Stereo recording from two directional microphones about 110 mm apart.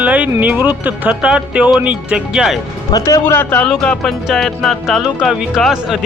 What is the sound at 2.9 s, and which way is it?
Speech, 30° left (ahead or behind).